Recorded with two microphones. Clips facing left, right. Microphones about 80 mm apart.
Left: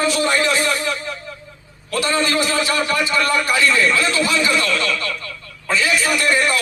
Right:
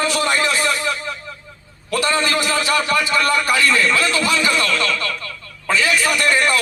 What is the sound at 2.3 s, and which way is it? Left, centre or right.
A man's voice, left.